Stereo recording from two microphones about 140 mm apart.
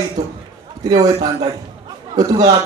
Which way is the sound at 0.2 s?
25° right (ahead or behind).